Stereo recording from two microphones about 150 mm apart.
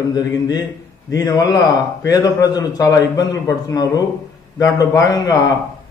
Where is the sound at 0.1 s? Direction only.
25° left (ahead or behind).